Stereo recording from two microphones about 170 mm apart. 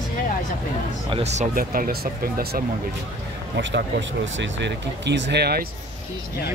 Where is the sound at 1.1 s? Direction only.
40° right (ahead or behind); by 2.6 s 60° right (ahead or behind).